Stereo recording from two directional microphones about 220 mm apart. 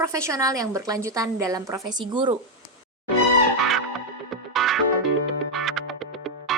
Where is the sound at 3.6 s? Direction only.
Centre (ahead or behind).